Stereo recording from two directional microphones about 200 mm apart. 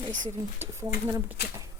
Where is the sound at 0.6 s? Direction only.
15° right (ahead or behind).